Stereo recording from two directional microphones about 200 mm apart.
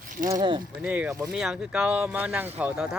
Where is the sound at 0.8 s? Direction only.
5° right (ahead or behind).